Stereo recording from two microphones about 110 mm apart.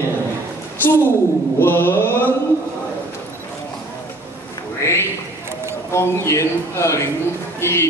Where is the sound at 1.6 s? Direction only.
20° left (ahead or behind).